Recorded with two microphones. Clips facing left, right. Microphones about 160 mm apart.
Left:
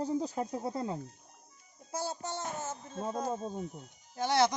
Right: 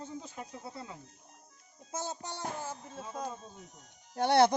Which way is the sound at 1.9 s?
20° right (ahead or behind).